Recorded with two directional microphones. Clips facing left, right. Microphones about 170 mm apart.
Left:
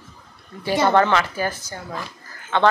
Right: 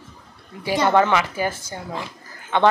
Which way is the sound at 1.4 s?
25° right (ahead or behind).